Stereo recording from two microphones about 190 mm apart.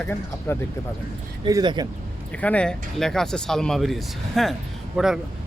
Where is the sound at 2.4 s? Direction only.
5° left (ahead or behind).